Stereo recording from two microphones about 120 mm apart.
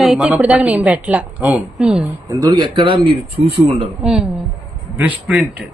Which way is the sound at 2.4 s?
40° right (ahead or behind).